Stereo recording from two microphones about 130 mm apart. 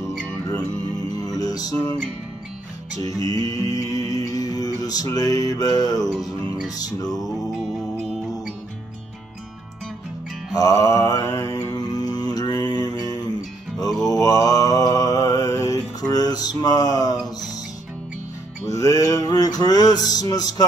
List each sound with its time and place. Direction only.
1.1 s music: 30° left (ahead or behind)
3.0 s music: 25° left (ahead or behind)
7.2 s music: centre (ahead or behind)
10.5 s mantra: 25° left (ahead or behind)
18.7 s music: 25° left (ahead or behind)